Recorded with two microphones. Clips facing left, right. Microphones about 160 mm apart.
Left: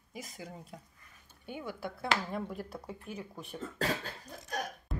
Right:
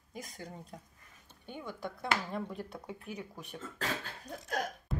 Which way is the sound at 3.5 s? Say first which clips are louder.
Left 4 dB; 35° left (ahead or behind).